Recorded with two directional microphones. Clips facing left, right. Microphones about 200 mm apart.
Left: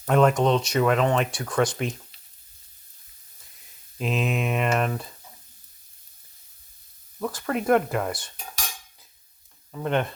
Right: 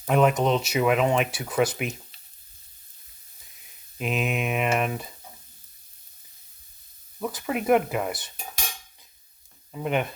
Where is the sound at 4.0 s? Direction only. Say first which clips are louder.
Left 1 dB; 5° right (ahead or behind).